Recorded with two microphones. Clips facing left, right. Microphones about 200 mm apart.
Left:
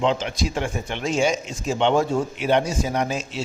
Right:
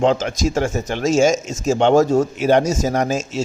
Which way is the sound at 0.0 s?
45° right (ahead or behind).